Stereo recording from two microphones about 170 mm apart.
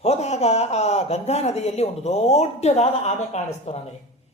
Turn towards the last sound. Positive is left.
turn(degrees=40)  # may be behind; listen again after turning